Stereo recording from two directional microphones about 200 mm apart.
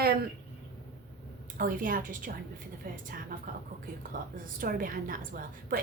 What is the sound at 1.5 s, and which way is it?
Speech, 45° right (ahead or behind).